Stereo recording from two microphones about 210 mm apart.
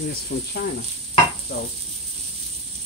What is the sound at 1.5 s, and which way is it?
Speech, 50° left (ahead or behind).